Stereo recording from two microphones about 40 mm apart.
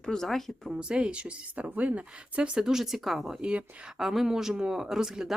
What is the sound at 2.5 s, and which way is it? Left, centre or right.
Speech, centre.